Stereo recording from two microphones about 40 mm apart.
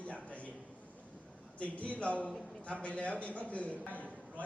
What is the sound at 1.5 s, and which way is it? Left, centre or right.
A man's voice, left.